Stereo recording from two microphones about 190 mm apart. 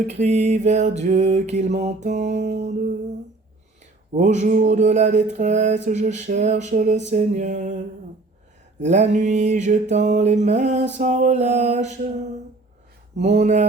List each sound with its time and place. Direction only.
0.1 s mantra: 35° right (ahead or behind)
4.1 s mantra: 40° right (ahead or behind)
8.8 s mantra: 40° right (ahead or behind)
13.1 s mantra: 35° right (ahead or behind)